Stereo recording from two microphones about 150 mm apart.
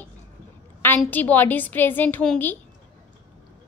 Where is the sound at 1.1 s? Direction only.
10° left (ahead or behind).